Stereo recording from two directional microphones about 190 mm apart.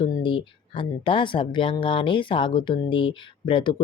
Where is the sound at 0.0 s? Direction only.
25° left (ahead or behind).